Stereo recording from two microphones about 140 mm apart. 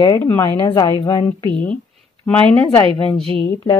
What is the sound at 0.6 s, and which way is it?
Speech, 30° left (ahead or behind).